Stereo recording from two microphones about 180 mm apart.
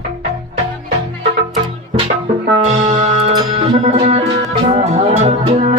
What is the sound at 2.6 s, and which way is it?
Music, 40° right (ahead or behind).